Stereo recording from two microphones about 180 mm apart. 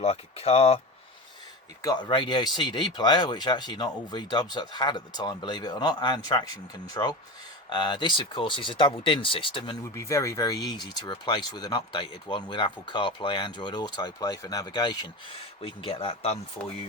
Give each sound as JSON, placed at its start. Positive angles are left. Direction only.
{"t": 0.0, "sound": "speech", "side_deg": 35}
{"t": 1.8, "sound": "speech", "side_deg": 25}
{"t": 9.9, "sound": "speech", "side_deg": 15}